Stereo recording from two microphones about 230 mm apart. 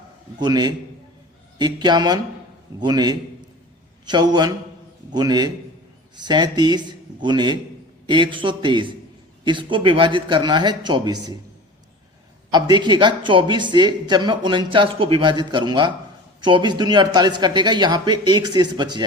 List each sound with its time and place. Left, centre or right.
0.3 s a man's voice: centre
12.5 s speech: centre